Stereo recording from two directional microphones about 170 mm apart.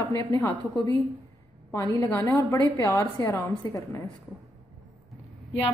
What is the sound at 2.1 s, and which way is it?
A woman's voice, 10° left (ahead or behind).